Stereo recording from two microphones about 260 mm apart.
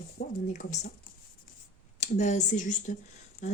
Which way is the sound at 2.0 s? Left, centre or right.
Left.